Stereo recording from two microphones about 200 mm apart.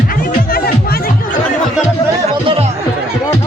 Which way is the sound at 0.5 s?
50° left (ahead or behind).